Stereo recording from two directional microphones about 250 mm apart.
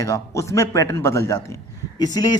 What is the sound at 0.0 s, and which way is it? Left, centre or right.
Speech, centre.